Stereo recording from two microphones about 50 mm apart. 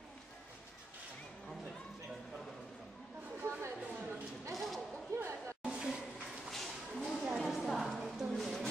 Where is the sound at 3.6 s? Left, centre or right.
Right.